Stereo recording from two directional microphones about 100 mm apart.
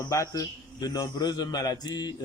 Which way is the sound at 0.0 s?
30° left (ahead or behind).